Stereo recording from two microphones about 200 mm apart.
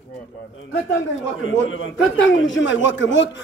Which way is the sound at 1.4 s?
80° left.